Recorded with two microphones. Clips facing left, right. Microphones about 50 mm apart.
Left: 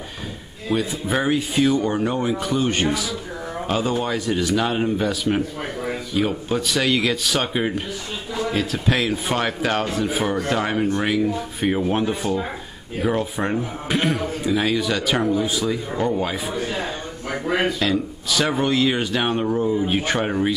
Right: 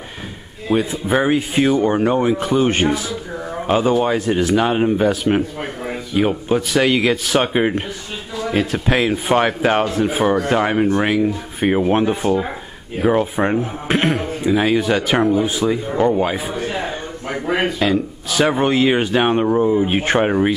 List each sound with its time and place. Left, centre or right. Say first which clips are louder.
0.7 s speech: right 5 dB; right
17.3 s speech: right 2 dB; centre
17.6 s speech: right 3 dB; right